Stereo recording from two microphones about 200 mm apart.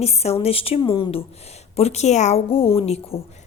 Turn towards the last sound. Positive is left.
turn(degrees=30)  # may be behind; listen again after turning